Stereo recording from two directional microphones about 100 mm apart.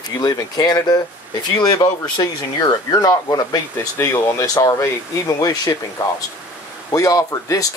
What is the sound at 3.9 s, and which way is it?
Speech, 25° left (ahead or behind).